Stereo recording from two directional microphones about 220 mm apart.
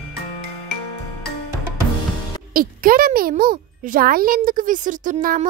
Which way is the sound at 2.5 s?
40° right (ahead or behind).